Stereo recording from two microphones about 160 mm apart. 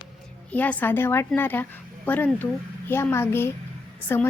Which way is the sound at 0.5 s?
10° left (ahead or behind).